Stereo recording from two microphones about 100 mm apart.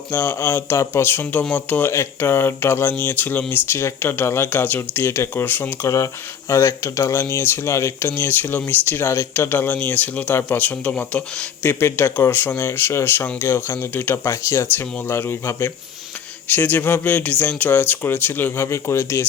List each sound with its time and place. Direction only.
0.1 s speech: 20° left (ahead or behind)
1.9 s speech: 25° left (ahead or behind)